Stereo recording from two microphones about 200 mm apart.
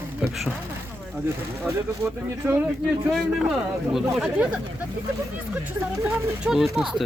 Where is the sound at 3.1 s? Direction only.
Centre (ahead or behind).